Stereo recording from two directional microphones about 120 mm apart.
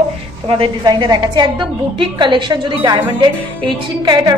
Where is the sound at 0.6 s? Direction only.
35° right (ahead or behind).